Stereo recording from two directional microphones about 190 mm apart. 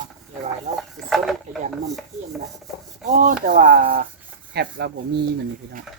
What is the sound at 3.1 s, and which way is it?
Speech, 45° right (ahead or behind).